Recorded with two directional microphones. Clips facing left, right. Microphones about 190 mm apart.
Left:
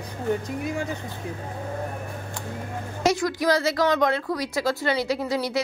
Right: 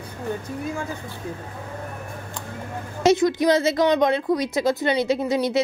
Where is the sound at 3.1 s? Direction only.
20° right (ahead or behind).